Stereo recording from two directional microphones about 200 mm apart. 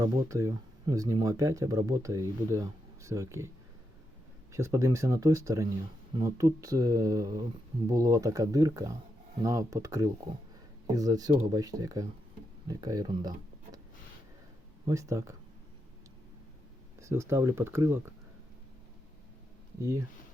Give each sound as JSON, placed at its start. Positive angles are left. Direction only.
{"t": 0.0, "sound": "speech", "side_deg": -15}
{"t": 4.5, "sound": "speech", "side_deg": -15}
{"t": 14.8, "sound": "speech", "side_deg": -15}
{"t": 17.0, "sound": "speech", "side_deg": -15}